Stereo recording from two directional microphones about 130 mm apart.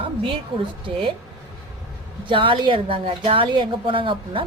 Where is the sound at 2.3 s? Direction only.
40° right (ahead or behind).